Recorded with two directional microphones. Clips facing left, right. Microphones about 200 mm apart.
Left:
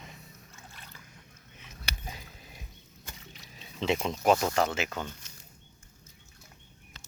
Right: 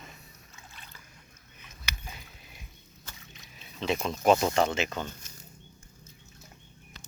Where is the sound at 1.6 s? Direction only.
25° left (ahead or behind).